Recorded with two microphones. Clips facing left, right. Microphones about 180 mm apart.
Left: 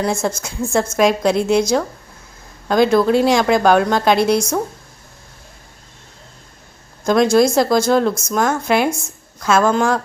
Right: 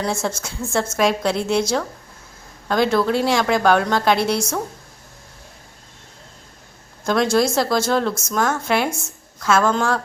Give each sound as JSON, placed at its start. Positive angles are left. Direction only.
{"t": 0.0, "sound": "a woman's voice", "side_deg": 10}
{"t": 7.0, "sound": "a woman's voice", "side_deg": 15}